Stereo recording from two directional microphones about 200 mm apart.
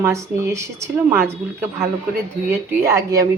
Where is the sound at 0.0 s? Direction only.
15° right (ahead or behind).